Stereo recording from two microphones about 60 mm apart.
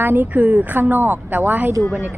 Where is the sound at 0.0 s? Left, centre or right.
Right.